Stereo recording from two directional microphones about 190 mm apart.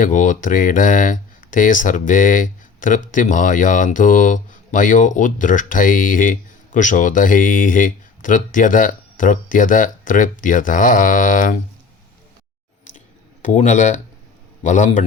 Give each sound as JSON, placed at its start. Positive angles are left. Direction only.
{"t": 0.0, "sound": "speech", "side_deg": 40}
{"t": 13.4, "sound": "speech", "side_deg": 40}